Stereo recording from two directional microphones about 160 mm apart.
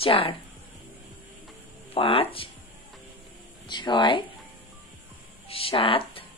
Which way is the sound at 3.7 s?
30° left (ahead or behind).